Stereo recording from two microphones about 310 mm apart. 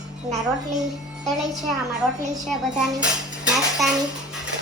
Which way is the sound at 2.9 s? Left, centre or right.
Centre.